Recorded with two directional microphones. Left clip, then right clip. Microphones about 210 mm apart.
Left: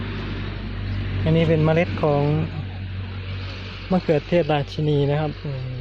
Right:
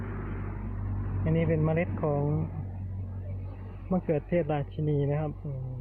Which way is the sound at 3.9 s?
20° left (ahead or behind).